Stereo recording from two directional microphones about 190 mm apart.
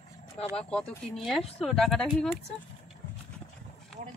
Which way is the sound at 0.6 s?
5° left (ahead or behind).